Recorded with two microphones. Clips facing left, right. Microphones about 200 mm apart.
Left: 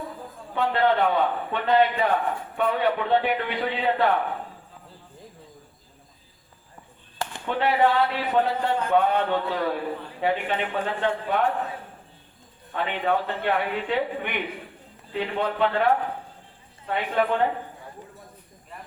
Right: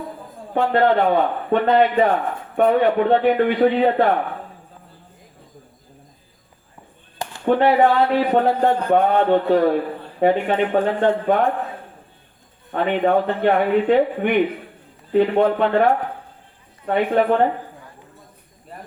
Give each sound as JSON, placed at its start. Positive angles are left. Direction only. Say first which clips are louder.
{"t": 0.5, "sound": "a man's voice", "louder": "right 5 dB", "side_deg": -50}
{"t": 7.4, "sound": "a man's voice", "louder": "right 7 dB", "side_deg": -50}
{"t": 12.7, "sound": "a man's voice", "louder": "right 7 dB", "side_deg": -50}